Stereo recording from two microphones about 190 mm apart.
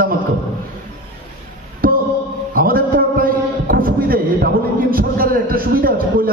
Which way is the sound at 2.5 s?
50° right (ahead or behind).